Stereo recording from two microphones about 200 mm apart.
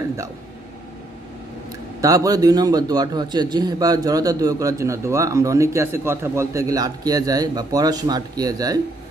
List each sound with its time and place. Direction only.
2.0 s a man's voice: 15° right (ahead or behind)